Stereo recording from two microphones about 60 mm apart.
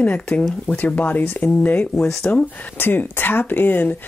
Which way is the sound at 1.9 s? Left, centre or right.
Centre.